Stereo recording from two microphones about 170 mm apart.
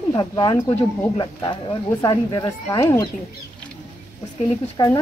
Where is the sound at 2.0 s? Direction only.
25° left (ahead or behind).